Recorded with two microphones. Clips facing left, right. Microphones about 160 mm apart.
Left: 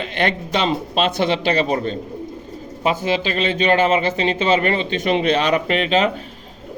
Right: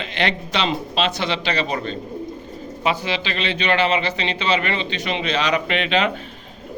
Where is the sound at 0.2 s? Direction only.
45° left (ahead or behind).